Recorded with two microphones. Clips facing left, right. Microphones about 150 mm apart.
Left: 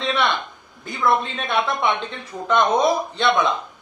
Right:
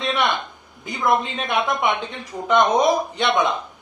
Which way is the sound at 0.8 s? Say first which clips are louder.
Even; 15° right (ahead or behind).